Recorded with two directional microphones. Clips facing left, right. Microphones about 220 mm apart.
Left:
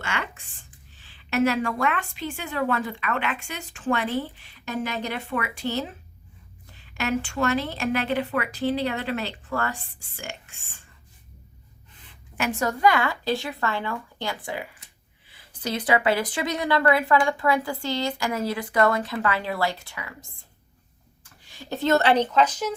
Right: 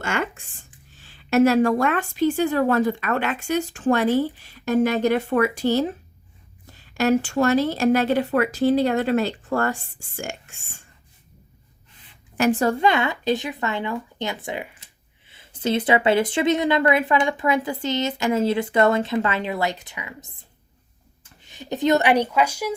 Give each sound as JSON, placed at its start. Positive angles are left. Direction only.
{"t": 0.0, "sound": "a woman's voice", "side_deg": -45}
{"t": 6.9, "sound": "a woman's voice", "side_deg": -40}
{"t": 12.4, "sound": "speech", "side_deg": -35}
{"t": 21.4, "sound": "speech", "side_deg": -20}